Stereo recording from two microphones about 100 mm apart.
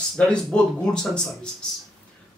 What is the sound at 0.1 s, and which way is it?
Speech, 5° left (ahead or behind).